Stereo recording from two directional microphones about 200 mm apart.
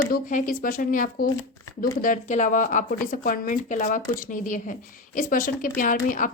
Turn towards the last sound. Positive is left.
turn(degrees=40)  # may be behind; listen again after turning